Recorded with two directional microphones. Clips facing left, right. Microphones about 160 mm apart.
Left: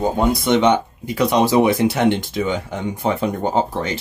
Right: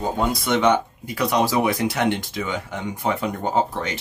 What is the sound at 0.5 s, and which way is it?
Speech, 20° left (ahead or behind).